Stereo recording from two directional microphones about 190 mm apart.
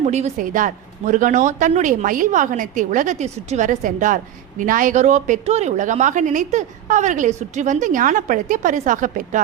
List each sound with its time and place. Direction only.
0.0 s a woman's voice: 35° right (ahead or behind)